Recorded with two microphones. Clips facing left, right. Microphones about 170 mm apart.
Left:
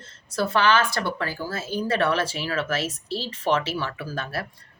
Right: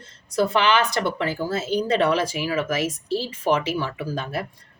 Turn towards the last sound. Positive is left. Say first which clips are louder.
# right 3 dB
turn(degrees=-15)  # may be behind; listen again after turning